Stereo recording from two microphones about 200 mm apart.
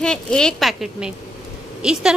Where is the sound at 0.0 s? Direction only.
5° left (ahead or behind).